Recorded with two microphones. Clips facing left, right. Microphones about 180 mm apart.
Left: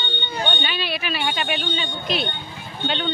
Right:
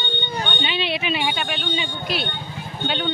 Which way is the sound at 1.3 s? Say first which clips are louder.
Left 2 dB; centre (ahead or behind).